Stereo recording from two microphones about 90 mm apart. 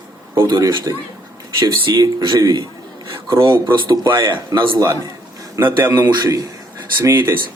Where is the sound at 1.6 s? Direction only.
60° right (ahead or behind).